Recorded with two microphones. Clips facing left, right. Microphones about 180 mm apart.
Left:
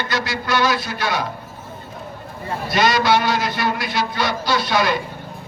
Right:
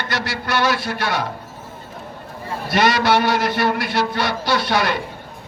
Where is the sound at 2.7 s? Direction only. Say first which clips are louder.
Right 1 dB; 60° right (ahead or behind).